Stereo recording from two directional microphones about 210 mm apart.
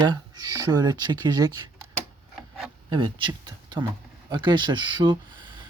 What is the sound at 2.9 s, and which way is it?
Speech, 25° right (ahead or behind).